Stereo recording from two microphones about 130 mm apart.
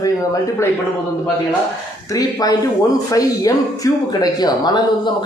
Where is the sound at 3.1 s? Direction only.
25° left (ahead or behind).